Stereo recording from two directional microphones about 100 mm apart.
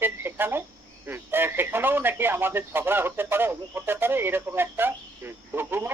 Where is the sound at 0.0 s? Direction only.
20° right (ahead or behind).